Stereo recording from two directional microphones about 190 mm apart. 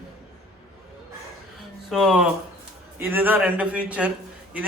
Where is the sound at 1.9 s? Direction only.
Centre (ahead or behind).